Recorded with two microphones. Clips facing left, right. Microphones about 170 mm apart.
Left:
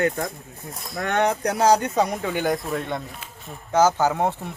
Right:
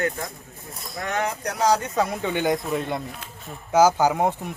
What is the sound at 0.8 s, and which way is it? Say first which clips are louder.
Speech: left 3 dB; centre (ahead or behind).